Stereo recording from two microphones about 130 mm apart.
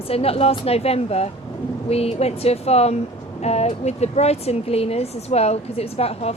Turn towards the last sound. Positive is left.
turn(degrees=50)  # may be behind; listen again after turning